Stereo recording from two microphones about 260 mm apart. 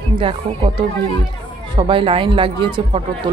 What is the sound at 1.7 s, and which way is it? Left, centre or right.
A man's voice, centre.